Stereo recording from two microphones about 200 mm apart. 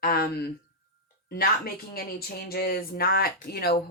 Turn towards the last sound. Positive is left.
turn(degrees=50)  # may be behind; listen again after turning